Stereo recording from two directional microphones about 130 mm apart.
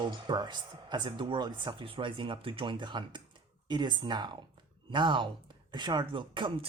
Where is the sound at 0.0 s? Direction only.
35° right (ahead or behind).